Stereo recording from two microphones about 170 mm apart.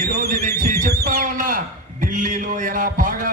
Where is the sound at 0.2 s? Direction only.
50° right (ahead or behind).